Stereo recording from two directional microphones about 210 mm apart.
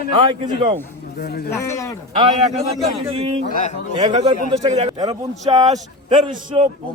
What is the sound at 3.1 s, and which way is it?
Speech, 25° right (ahead or behind).